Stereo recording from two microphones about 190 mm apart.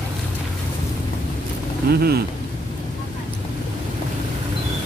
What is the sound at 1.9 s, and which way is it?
Speech, 55° right (ahead or behind).